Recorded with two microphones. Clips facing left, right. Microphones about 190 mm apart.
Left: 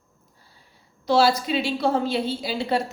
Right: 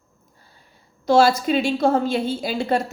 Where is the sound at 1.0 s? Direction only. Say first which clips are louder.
Right 3 dB; 50° right (ahead or behind).